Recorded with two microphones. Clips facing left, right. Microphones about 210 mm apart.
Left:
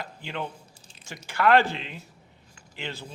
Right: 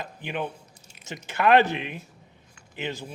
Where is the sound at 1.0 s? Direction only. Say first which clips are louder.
Right 1 dB; 20° right (ahead or behind).